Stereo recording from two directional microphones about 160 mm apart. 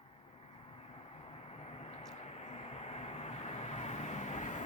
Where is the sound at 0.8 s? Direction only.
35° left (ahead or behind).